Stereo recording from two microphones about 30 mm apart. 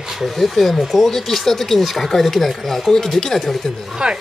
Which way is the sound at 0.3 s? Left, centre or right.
Centre.